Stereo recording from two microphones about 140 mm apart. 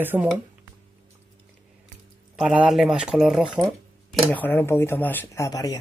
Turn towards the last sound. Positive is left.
turn(degrees=25)  # may be behind; listen again after turning